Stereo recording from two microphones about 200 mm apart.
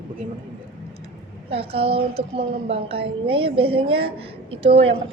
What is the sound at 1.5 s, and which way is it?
A woman's voice, 30° right (ahead or behind).